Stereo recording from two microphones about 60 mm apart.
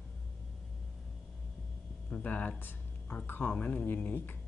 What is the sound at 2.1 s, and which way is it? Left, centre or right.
Speech, left.